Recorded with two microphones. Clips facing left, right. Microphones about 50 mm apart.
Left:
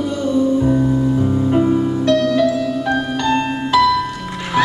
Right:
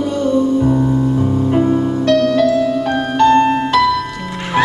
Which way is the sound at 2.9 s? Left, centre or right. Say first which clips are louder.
Right 7 dB; right.